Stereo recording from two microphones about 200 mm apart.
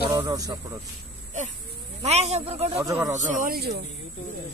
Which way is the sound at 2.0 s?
35° right (ahead or behind).